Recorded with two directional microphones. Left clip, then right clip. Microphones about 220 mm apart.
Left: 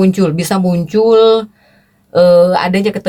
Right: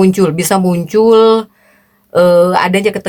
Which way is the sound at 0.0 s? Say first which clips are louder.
Right 3 dB; 35° right (ahead or behind).